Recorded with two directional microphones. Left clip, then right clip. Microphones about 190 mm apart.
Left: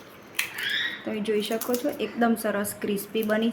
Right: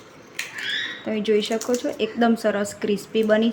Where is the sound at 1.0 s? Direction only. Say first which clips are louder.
Right 6 dB; 15° right (ahead or behind).